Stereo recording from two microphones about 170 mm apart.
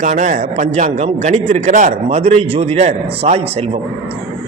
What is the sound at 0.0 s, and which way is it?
A man's voice, 45° right (ahead or behind).